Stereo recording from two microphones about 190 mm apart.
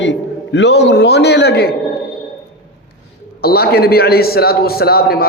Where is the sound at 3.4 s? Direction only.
55° left (ahead or behind).